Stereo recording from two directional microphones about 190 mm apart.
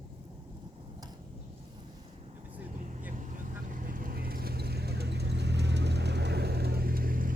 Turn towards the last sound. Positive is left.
turn(degrees=-50)  # may be behind; listen again after turning